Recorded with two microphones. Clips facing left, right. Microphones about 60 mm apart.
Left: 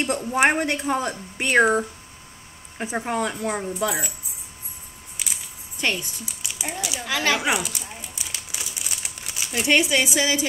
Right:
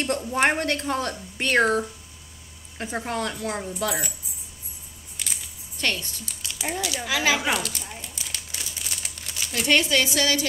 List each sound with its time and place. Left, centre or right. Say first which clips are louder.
0.0 s speech: left 2 dB; centre
5.2 s a sound: left 1 dB; centre
5.8 s speech: left 2 dB; centre
7.0 s speech: left 1 dB; centre
7.3 s speech: left 2 dB; centre
8.0 s crumpling: left 1 dB; centre